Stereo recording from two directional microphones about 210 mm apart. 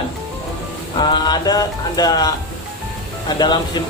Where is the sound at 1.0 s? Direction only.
20° left (ahead or behind).